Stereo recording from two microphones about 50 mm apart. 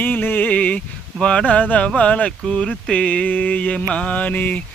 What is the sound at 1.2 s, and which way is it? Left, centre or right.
Speech, centre.